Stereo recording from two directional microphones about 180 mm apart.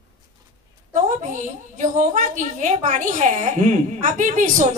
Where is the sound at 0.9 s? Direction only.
45° right (ahead or behind).